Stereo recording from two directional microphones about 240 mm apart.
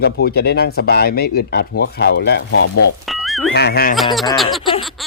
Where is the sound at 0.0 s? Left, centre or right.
Left.